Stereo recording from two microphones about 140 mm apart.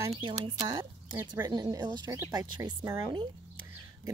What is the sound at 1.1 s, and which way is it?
Speech, 15° right (ahead or behind).